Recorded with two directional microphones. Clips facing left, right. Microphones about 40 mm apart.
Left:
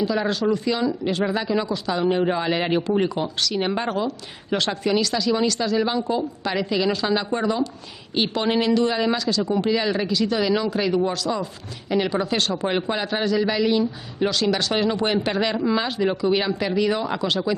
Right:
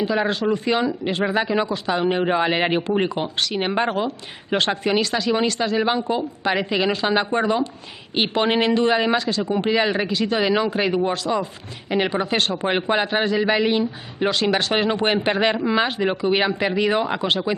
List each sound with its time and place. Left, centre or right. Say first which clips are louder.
0.0 s speech: right 1 dB; right